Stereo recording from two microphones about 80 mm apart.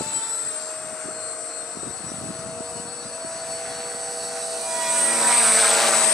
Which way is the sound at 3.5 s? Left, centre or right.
Centre.